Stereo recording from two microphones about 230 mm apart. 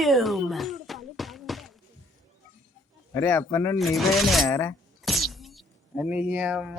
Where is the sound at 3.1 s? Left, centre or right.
Centre.